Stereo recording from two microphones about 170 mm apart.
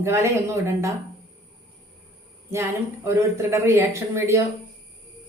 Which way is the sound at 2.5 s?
15° right (ahead or behind).